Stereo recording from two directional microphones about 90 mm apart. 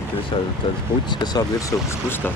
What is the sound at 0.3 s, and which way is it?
Speech, 55° left (ahead or behind).